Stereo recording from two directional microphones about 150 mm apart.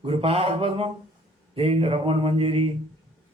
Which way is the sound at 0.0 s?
40° right (ahead or behind).